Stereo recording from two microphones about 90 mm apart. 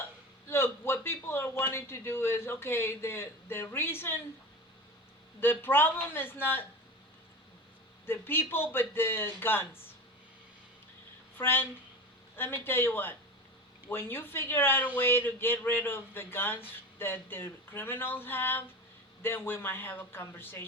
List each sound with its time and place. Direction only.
0.0 s a sound: 30° left (ahead or behind)
5.4 s a man's voice: 25° left (ahead or behind)
8.0 s a man's voice: 25° left (ahead or behind)
11.3 s a man's voice: 25° left (ahead or behind)